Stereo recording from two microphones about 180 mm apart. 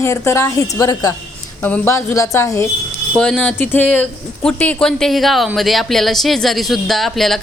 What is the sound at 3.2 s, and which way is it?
Speech, 5° left (ahead or behind).